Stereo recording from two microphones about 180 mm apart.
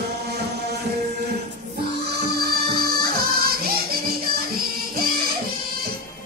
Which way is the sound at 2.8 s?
55° right (ahead or behind).